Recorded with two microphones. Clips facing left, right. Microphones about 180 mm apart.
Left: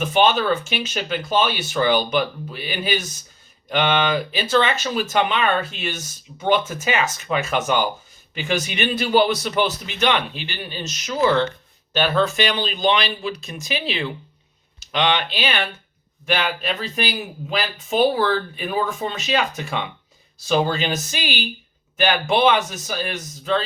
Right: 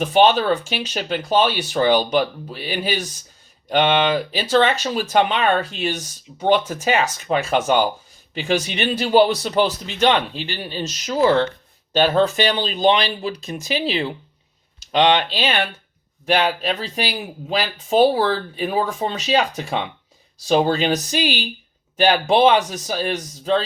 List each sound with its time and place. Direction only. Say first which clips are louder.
0.0 s speech: right 3 dB; 35° right (ahead or behind)